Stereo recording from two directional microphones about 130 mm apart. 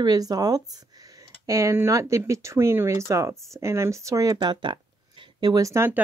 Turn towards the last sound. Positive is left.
turn(degrees=-25)  # may be behind; listen again after turning